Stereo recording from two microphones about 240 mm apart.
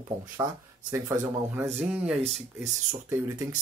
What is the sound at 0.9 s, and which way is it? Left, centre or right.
Speech, centre.